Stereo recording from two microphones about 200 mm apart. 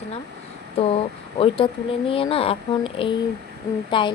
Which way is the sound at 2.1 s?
30° left (ahead or behind).